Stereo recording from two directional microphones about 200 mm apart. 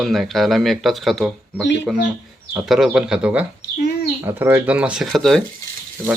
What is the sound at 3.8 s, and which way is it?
Bird, 50° left (ahead or behind).